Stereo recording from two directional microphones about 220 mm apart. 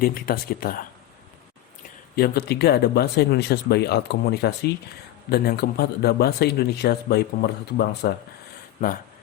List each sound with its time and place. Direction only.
0.0 s speech: 40° left (ahead or behind)
2.1 s a man's voice: 45° left (ahead or behind)